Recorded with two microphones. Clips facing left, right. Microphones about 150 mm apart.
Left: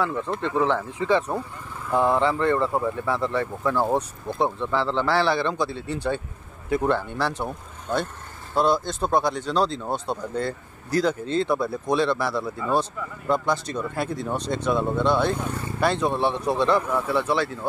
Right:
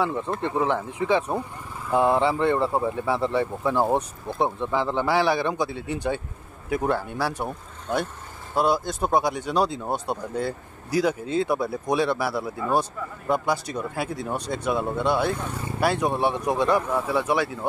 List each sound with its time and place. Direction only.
0.0 s speech: 20° right (ahead or behind)